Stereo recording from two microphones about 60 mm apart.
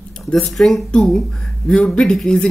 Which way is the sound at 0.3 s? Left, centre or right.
Centre.